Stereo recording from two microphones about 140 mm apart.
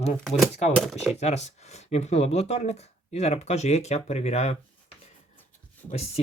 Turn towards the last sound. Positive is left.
turn(degrees=45)  # may be behind; listen again after turning